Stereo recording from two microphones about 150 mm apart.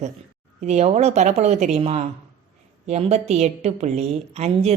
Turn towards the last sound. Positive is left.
turn(degrees=-45)  # may be behind; listen again after turning